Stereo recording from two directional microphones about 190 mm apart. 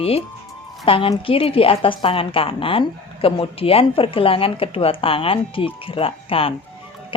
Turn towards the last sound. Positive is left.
turn(degrees=30)  # may be behind; listen again after turning